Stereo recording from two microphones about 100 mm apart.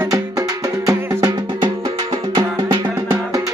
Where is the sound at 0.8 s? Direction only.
35° right (ahead or behind).